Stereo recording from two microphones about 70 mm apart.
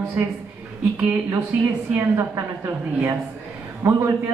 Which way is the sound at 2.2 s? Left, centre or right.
Right.